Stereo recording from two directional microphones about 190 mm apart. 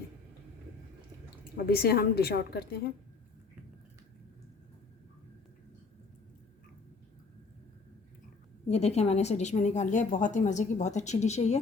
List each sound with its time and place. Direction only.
1.5 s a woman's voice: 55° left (ahead or behind)
8.6 s a woman's voice: 35° left (ahead or behind)